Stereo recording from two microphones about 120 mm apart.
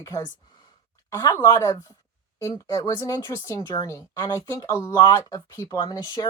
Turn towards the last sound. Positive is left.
turn(degrees=30)  # may be behind; listen again after turning